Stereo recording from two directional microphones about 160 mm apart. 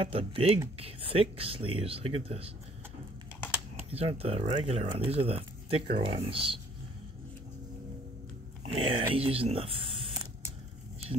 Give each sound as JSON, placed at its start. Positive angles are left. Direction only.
{"t": 0.0, "sound": "speech", "side_deg": -35}
{"t": 3.9, "sound": "speech", "side_deg": -40}
{"t": 8.6, "sound": "speech", "side_deg": -35}